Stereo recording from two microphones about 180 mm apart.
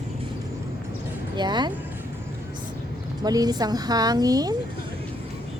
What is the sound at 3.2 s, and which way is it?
Speech, 20° right (ahead or behind).